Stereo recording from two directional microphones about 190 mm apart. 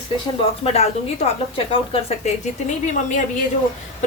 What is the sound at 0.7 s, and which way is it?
Speech, 30° left (ahead or behind).